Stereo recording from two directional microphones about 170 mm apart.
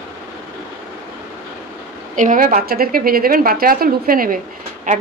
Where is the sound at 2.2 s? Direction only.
50° right (ahead or behind).